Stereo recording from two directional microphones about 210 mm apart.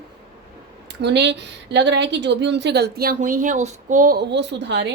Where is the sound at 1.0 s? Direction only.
55° right (ahead or behind).